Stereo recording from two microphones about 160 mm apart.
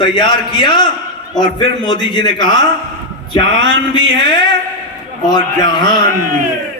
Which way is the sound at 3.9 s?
30° left (ahead or behind).